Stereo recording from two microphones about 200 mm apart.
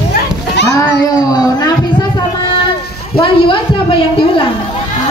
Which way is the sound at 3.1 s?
25° left (ahead or behind).